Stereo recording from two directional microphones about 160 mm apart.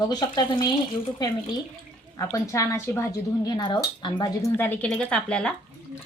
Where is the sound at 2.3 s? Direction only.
20° left (ahead or behind).